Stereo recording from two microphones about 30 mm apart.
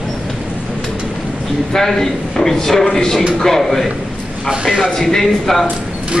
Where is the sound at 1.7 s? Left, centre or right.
Centre.